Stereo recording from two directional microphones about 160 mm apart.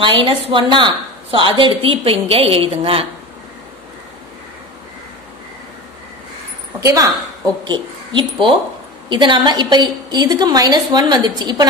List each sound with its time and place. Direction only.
0.5 s a woman's voice: 30° right (ahead or behind)
6.8 s a woman's voice: 20° right (ahead or behind)